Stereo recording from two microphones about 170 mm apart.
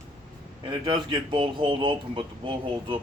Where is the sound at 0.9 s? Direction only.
30° right (ahead or behind).